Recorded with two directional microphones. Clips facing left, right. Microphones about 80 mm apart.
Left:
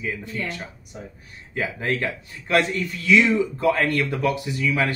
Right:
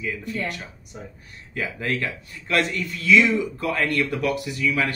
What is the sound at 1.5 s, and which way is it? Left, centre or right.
Speech, left.